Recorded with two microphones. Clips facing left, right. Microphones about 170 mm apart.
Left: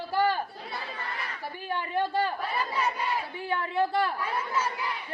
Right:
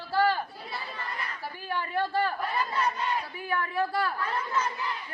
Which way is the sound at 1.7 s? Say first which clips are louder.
Left 1 dB; 20° left (ahead or behind).